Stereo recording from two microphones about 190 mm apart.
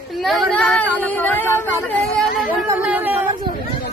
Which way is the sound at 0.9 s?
10° left (ahead or behind).